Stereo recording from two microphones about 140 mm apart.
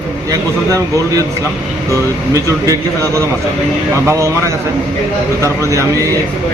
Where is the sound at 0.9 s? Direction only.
25° right (ahead or behind).